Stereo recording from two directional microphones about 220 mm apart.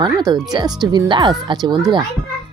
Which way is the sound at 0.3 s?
15° right (ahead or behind).